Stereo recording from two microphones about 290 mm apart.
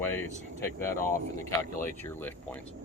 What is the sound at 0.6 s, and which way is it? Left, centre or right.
Speech, centre.